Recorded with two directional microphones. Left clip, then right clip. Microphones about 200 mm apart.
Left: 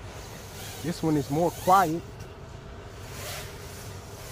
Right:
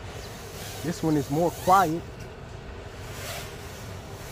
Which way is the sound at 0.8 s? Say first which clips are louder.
Right 1 dB; 15° left (ahead or behind).